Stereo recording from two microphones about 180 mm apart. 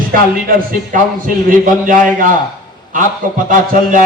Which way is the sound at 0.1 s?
50° right (ahead or behind).